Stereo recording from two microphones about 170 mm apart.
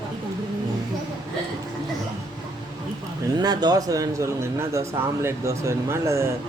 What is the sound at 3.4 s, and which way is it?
Speech, 25° right (ahead or behind).